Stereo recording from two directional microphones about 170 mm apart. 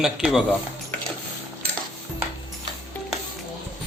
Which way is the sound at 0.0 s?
5° right (ahead or behind).